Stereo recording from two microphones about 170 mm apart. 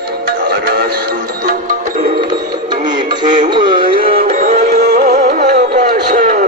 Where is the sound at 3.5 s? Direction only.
25° right (ahead or behind).